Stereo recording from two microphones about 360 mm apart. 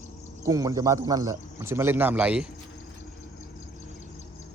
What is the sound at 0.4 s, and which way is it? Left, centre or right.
Speech, centre.